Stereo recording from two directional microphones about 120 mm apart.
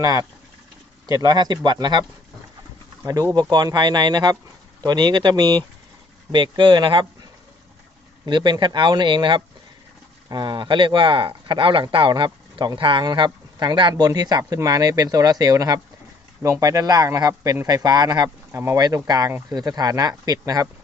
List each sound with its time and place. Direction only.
0.0 s speech: 30° right (ahead or behind)
3.5 s speech: 35° right (ahead or behind)
8.2 s speech: 40° right (ahead or behind)
18.5 s speech: 20° right (ahead or behind)
18.8 s speech: 35° right (ahead or behind)